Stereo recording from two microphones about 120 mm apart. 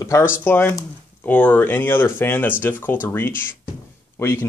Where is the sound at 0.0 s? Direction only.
25° left (ahead or behind).